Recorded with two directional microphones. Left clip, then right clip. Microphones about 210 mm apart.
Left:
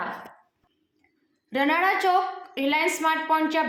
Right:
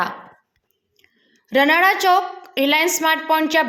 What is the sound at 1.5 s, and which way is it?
A woman's voice, 50° right (ahead or behind).